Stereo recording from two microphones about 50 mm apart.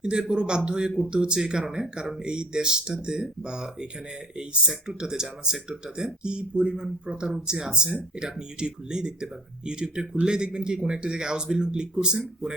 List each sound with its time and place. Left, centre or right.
0.0 s speech: centre